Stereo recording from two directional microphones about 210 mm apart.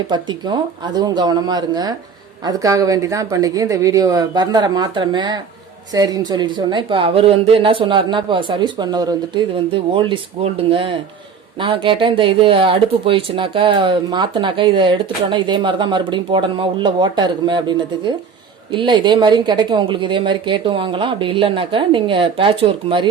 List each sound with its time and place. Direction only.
0.1 s speech: 20° right (ahead or behind)